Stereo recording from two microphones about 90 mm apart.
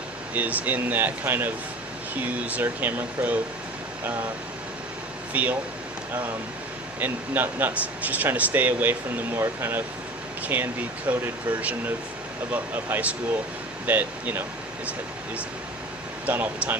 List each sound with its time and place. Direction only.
0.3 s speech: 20° right (ahead or behind)
5.3 s speech: 15° right (ahead or behind)
7.0 s speech: 20° right (ahead or behind)
16.2 s speech: 20° right (ahead or behind)